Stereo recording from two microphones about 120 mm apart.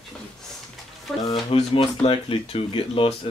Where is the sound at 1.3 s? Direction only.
50° left (ahead or behind).